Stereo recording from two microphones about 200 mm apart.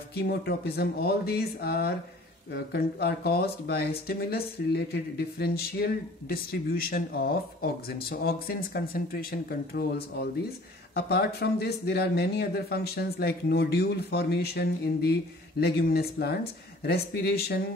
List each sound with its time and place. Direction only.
0.1 s speech: 50° left (ahead or behind)